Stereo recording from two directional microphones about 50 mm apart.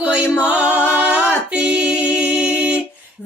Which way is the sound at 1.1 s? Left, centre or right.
Centre.